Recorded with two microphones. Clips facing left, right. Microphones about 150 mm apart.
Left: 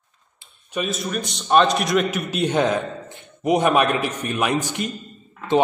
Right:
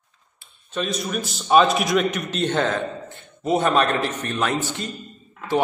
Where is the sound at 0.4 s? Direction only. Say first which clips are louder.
Left 1 dB; 15° left (ahead or behind).